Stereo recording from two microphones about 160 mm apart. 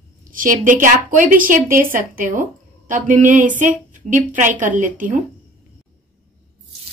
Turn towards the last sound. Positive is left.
turn(degrees=-55)  # may be behind; listen again after turning